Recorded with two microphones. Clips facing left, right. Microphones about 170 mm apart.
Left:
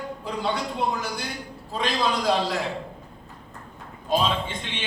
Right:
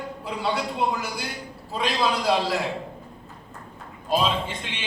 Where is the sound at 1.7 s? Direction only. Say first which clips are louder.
Right 1 dB; 5° right (ahead or behind).